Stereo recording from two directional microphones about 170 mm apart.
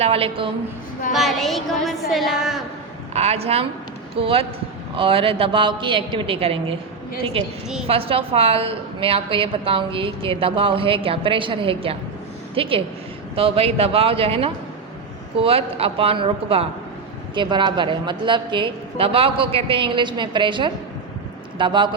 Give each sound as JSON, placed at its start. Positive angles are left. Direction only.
{"t": 0.0, "sound": "a woman's voice", "side_deg": -35}
{"t": 1.1, "sound": "a woman's voice", "side_deg": 0}
{"t": 3.1, "sound": "a woman's voice", "side_deg": -40}